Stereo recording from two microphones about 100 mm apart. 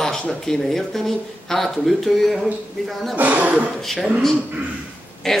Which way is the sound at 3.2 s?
15° right (ahead or behind).